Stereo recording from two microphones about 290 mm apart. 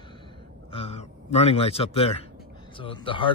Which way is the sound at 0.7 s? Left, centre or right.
Left.